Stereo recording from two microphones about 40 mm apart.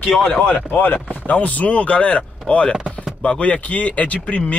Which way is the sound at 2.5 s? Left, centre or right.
Left.